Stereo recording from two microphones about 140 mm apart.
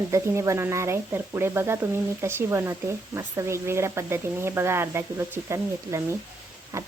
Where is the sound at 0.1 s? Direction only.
20° right (ahead or behind).